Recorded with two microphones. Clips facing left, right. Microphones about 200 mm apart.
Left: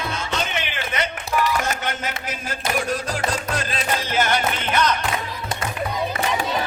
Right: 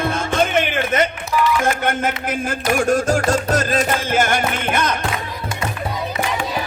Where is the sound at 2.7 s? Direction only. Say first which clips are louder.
Right 9 dB; 50° right (ahead or behind).